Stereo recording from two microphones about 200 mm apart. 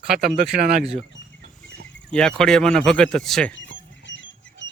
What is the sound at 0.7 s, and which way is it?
Speech, 30° right (ahead or behind).